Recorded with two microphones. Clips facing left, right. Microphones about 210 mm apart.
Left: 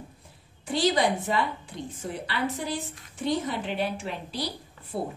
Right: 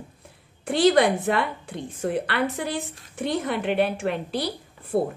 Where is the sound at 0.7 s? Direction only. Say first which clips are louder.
Right 6 dB; 60° right (ahead or behind).